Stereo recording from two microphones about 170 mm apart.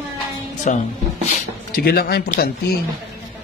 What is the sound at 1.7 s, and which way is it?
Speech, 65° left (ahead or behind).